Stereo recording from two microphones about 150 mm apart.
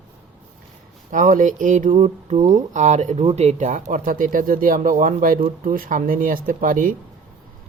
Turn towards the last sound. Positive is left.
turn(degrees=-65)  # may be behind; listen again after turning